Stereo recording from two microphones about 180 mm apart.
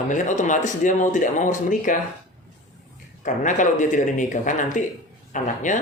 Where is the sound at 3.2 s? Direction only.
45° left (ahead or behind).